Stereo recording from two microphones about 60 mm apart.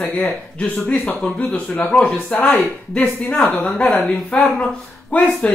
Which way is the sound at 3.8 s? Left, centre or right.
Centre.